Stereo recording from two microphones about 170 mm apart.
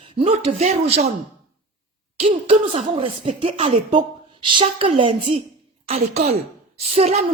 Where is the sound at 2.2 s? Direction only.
35° right (ahead or behind).